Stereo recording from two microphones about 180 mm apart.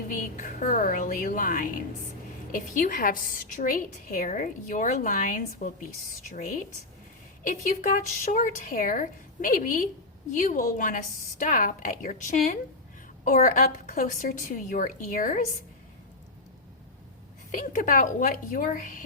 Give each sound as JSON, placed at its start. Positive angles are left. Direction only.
{"t": 0.1, "sound": "a woman's voice", "side_deg": 45}
{"t": 17.5, "sound": "a woman's voice", "side_deg": 50}